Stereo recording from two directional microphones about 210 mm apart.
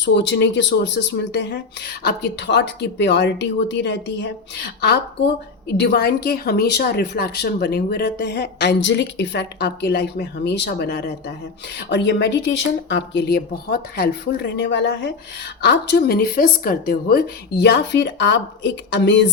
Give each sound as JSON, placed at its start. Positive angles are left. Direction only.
{"t": 0.0, "sound": "speech", "side_deg": 55}
{"t": 5.8, "sound": "a woman's voice", "side_deg": 50}